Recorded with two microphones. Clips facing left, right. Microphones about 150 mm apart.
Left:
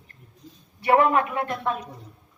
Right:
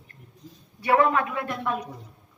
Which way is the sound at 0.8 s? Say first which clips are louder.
Left 2 dB; 30° left (ahead or behind).